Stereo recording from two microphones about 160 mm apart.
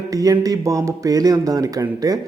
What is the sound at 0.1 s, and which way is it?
Speech, 20° right (ahead or behind).